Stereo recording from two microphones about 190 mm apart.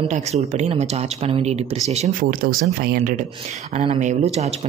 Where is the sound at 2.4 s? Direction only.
50° right (ahead or behind).